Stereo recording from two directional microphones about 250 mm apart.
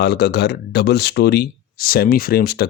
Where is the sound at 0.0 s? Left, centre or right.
Left.